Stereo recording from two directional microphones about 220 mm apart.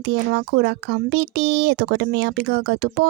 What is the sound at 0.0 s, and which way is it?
Speech, 50° right (ahead or behind).